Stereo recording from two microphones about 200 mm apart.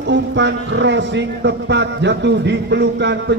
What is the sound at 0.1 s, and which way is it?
Speech, 60° right (ahead or behind).